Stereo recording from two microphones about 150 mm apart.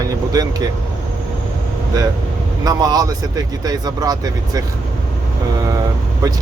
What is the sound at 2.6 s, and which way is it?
Speech, 25° right (ahead or behind).